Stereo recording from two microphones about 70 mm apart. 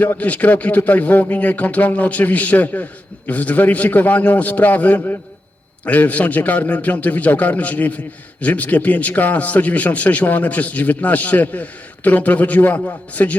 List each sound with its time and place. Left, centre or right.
0.0 s a man's voice: left